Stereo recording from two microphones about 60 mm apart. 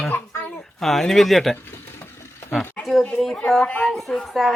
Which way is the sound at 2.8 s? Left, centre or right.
Centre.